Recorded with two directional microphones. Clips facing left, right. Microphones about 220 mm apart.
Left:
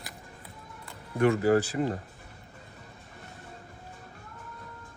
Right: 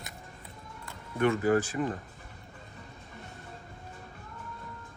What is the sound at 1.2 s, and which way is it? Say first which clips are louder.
Speech: left 2 dB; 35° left (ahead or behind).